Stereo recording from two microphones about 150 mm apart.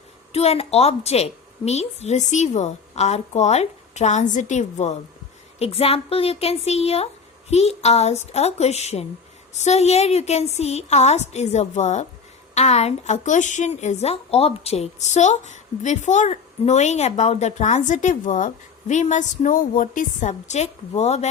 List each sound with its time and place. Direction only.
0.3 s a woman's voice: 45° left (ahead or behind)